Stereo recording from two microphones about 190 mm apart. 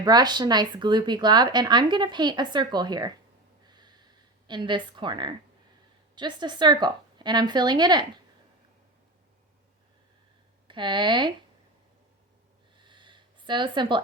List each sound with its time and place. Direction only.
0.0 s speech: 20° right (ahead or behind)
3.7 s snort: 20° right (ahead or behind)
4.4 s speech: 25° right (ahead or behind)
10.7 s speech: 25° right (ahead or behind)
12.7 s a sound: 25° right (ahead or behind)